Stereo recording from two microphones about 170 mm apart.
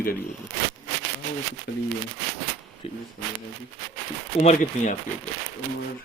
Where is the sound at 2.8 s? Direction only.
35° left (ahead or behind).